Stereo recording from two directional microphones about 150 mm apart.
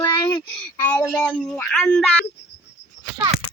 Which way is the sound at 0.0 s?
30° left (ahead or behind).